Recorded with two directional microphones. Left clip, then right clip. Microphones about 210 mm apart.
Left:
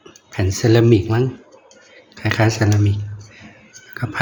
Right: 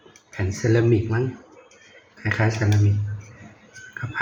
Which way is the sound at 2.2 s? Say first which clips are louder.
Left 6 dB; 50° left (ahead or behind).